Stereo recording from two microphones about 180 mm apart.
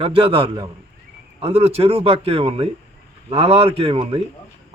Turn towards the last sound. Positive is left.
turn(degrees=-30)  # may be behind; listen again after turning